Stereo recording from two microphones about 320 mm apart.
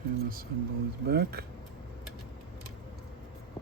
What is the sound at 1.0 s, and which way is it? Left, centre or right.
Speech, right.